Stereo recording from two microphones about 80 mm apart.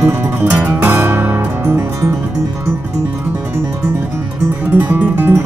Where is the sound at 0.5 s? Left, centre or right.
Centre.